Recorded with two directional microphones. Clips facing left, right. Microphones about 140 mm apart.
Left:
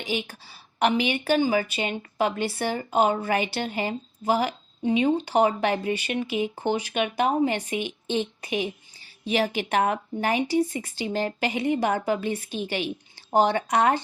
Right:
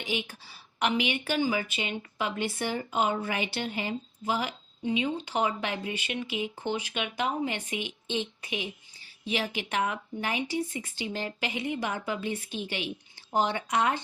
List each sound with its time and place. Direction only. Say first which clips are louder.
0.0 s speech: left 4 dB; 35° left (ahead or behind)